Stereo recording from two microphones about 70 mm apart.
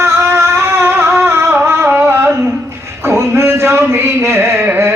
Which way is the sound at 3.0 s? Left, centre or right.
Right.